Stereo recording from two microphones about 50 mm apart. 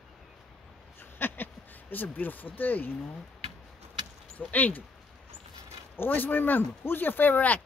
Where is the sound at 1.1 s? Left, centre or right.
Left.